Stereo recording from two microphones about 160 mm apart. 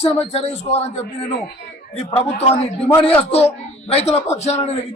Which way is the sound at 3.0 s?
35° left (ahead or behind).